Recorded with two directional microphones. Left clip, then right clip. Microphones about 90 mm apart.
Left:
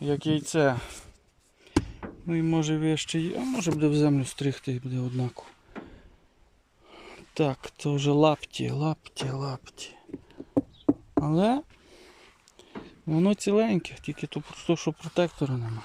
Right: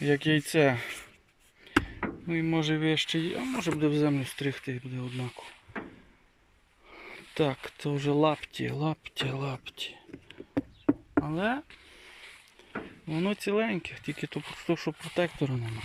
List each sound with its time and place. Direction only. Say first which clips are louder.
0.0 s speech: right 2 dB; 5° left (ahead or behind); by 5.5 s 50° left (ahead or behind)
6.9 s speech: left 1 dB; 20° left (ahead or behind)
8.6 s speech: right 1 dB; 15° left (ahead or behind)
10.8 s knock: right 1 dB; 35° left (ahead or behind); by 12.1 s 55° left (ahead or behind)
13.1 s speech: left 5 dB; 40° left (ahead or behind)
13.9 s speech: even; 15° left (ahead or behind)
15.4 s speech: left 1 dB; 5° left (ahead or behind)